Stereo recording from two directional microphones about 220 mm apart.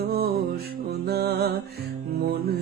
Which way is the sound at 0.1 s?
45° right (ahead or behind).